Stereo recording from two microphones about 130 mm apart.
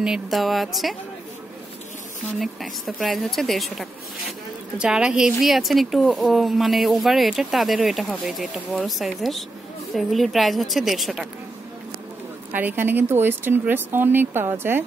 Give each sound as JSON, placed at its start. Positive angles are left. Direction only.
{"t": 0.0, "sound": "a woman's voice", "side_deg": -5}
{"t": 2.3, "sound": "a woman's voice", "side_deg": 0}
{"t": 12.5, "sound": "speech", "side_deg": -15}